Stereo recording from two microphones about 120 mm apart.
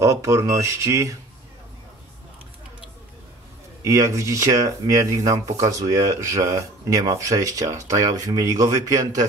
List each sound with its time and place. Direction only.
0.0 s speech: 25° right (ahead or behind)
3.8 s speech: 25° right (ahead or behind)